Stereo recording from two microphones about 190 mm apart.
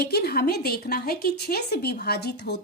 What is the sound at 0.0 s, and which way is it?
A woman's voice, 55° left (ahead or behind).